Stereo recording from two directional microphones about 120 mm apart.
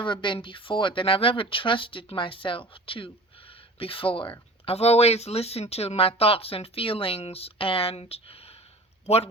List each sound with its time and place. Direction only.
0.0 s speech: 40° left (ahead or behind); by 9.3 s 60° left (ahead or behind)